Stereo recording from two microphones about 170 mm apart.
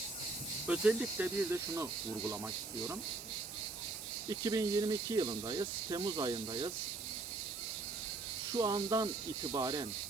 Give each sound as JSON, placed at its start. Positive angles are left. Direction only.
{"t": 0.7, "sound": "speech", "side_deg": -10}
{"t": 4.3, "sound": "speech", "side_deg": -20}
{"t": 8.5, "sound": "speech", "side_deg": -20}